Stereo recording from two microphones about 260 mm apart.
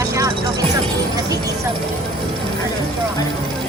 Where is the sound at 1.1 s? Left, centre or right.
Centre.